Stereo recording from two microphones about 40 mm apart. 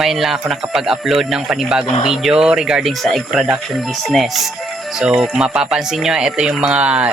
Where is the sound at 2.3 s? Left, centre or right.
Right.